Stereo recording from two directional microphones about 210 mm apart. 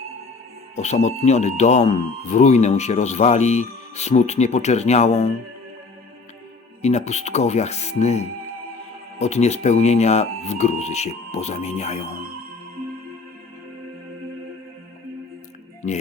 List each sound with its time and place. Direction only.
0.8 s speech: 30° left (ahead or behind)
6.8 s speech: 30° left (ahead or behind)